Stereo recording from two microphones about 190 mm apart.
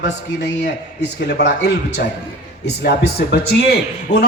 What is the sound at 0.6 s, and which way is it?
A man's voice, 65° left (ahead or behind).